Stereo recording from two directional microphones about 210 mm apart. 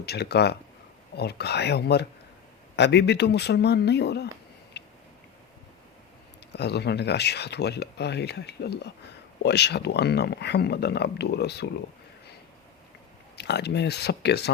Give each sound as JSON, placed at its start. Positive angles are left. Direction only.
{"t": 0.0, "sound": "speech", "side_deg": 50}
{"t": 4.7, "sound": "a sound", "side_deg": 55}
{"t": 6.5, "sound": "speech", "side_deg": 50}
{"t": 13.3, "sound": "speech", "side_deg": 55}